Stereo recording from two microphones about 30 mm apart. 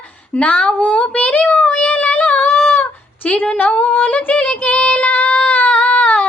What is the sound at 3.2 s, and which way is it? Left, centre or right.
Singing, left.